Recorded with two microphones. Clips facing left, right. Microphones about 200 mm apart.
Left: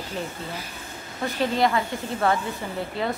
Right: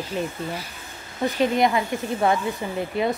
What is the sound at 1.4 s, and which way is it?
A woman's voice, 20° right (ahead or behind).